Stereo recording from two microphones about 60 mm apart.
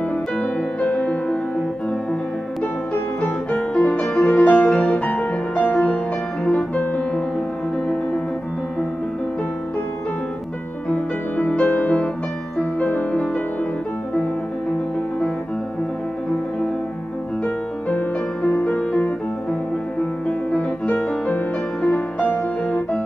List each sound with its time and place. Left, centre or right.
0.1 s music: left
3.2 s music: left
10.9 s music: left
17.8 s music: left
20.5 s music: left